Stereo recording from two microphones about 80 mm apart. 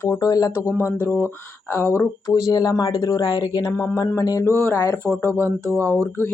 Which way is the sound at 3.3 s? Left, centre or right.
Left.